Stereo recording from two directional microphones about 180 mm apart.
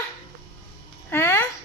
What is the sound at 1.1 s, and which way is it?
Speech, 15° left (ahead or behind).